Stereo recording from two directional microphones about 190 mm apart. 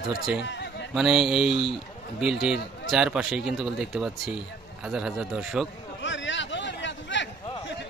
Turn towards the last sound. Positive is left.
turn(degrees=70)  # may be behind; listen again after turning